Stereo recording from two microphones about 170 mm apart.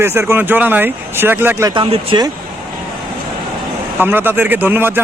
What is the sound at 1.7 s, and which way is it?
Speech, 30° right (ahead or behind).